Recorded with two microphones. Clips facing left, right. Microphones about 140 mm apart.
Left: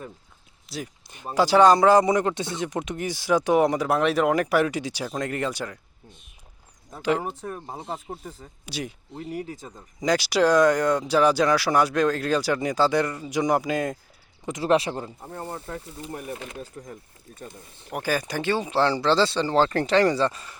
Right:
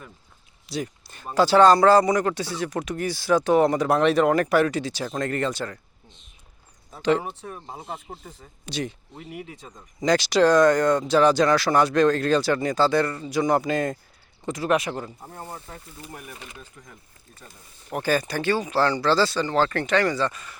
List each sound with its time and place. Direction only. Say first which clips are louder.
0.7 s speech: right 5 dB; centre (ahead or behind)
1.0 s speech: right 1 dB; 15° left (ahead or behind)
7.3 s speech: left 3 dB; 45° left (ahead or behind)
8.6 s speech: right 3 dB; 10° left (ahead or behind)
9.3 s speech: left 4 dB; 40° left (ahead or behind)
10.0 s speech: right 2 dB; 10° left (ahead or behind)
14.6 s speech: left 2 dB; 30° left (ahead or behind)
17.9 s speech: right 2 dB; 10° left (ahead or behind); by 20.6 s 30° left (ahead or behind)